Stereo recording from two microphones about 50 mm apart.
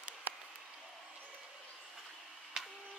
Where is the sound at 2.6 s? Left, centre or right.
Centre.